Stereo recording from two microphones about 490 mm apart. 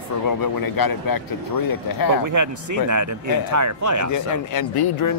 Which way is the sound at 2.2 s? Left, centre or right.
Right.